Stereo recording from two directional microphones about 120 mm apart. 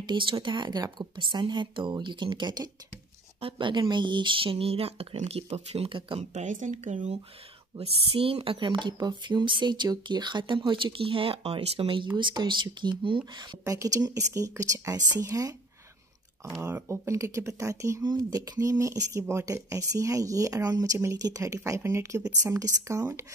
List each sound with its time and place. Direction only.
0.0 s speech: 45° right (ahead or behind)
3.3 s a woman's voice: 45° right (ahead or behind)
5.9 s a woman's voice: 45° right (ahead or behind)
6.3 s speech: 90° right; by 7.2 s 70° right (ahead or behind)
7.7 s a woman's voice: 50° right (ahead or behind); by 15.5 s 30° right (ahead or behind)
16.7 s speech: 20° right (ahead or behind)